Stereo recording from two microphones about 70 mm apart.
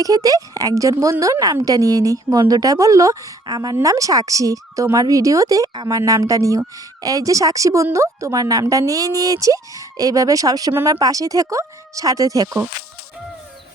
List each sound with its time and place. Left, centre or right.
0.0 s speech: right
3.4 s speech: right
3.8 s speech: right
6.1 s speech: right